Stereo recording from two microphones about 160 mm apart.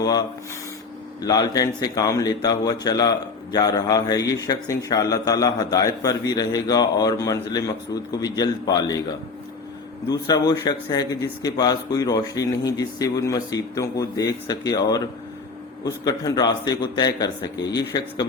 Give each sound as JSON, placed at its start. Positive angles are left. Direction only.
{"t": 0.0, "sound": "speech", "side_deg": 25}
{"t": 16.0, "sound": "speech", "side_deg": 25}